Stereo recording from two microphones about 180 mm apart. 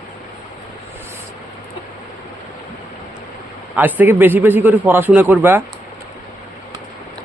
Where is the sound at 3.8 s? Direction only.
10° right (ahead or behind).